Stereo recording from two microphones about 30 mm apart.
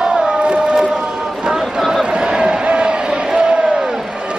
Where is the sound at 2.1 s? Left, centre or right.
Right.